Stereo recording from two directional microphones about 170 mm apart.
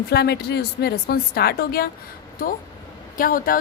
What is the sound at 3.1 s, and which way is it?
Speech, 55° left (ahead or behind).